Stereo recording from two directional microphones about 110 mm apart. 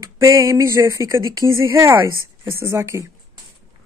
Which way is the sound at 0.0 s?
30° right (ahead or behind).